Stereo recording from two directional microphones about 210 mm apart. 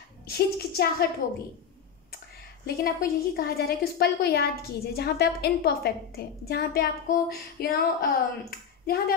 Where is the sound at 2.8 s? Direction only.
45° left (ahead or behind).